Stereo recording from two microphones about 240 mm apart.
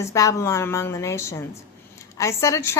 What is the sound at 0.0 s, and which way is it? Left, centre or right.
A woman's voice, centre.